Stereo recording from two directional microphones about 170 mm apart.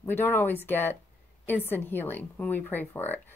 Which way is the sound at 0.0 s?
10° left (ahead or behind).